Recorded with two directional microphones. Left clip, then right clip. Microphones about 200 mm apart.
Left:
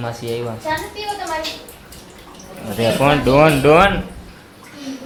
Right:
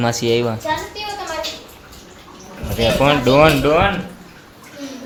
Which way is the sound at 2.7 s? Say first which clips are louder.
Even; 5° left (ahead or behind).